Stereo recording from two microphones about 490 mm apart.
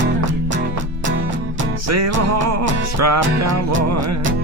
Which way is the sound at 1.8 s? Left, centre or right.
Right.